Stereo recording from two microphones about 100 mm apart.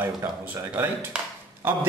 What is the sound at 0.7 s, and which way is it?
Speech, 20° right (ahead or behind).